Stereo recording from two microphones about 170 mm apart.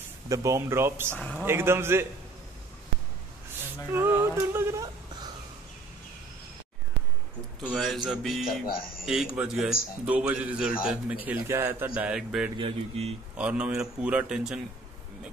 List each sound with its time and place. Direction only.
0.3 s speech: 20° right (ahead or behind)
1.1 s a man's voice: 5° left (ahead or behind)
1.4 s speech: 15° right (ahead or behind)
3.9 s humming: 10° right (ahead or behind)
7.6 s a man's voice: centre (ahead or behind)
8.6 s speech: 60° left (ahead or behind)
9.0 s a man's voice: 5° right (ahead or behind)
12.5 s speech: 35° right (ahead or behind)
13.4 s a man's voice: 5° right (ahead or behind)